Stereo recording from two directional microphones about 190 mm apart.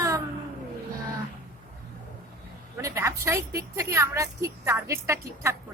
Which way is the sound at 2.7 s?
15° right (ahead or behind).